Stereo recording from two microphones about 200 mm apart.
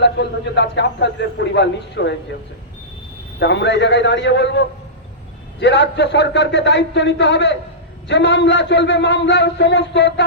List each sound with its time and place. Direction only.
0.0 s a man's voice: 60° left (ahead or behind)
3.4 s a man's voice: 60° left (ahead or behind)